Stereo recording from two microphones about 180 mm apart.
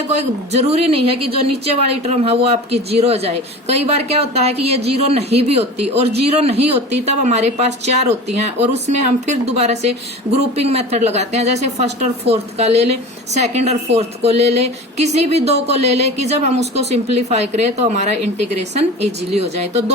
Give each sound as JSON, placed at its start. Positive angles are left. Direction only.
{"t": 0.1, "sound": "speech", "side_deg": -40}